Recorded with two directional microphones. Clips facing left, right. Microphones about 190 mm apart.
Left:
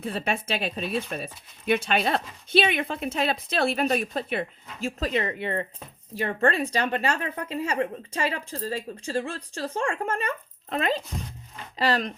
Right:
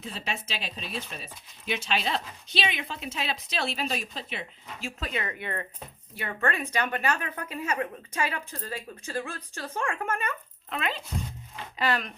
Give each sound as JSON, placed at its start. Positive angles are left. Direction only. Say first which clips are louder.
{"t": 0.0, "sound": "speech", "louder": "left 7 dB", "side_deg": 55}